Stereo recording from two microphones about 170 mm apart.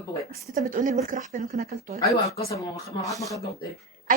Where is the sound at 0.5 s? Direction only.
50° right (ahead or behind).